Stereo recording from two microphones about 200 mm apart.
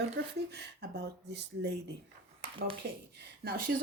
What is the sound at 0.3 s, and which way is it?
Speech, 55° right (ahead or behind).